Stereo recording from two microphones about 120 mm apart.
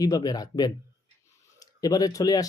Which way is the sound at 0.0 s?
30° left (ahead or behind).